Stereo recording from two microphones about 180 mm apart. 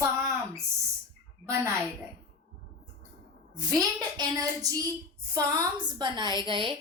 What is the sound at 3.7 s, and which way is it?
A woman's voice, 20° right (ahead or behind).